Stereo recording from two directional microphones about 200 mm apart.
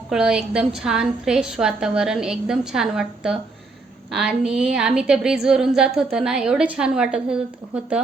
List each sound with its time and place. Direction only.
0.1 s a woman's voice: 5° right (ahead or behind)